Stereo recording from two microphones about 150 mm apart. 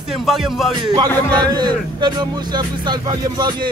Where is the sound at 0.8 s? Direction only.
30° right (ahead or behind).